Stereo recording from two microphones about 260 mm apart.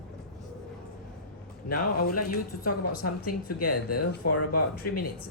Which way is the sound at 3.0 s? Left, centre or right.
Left.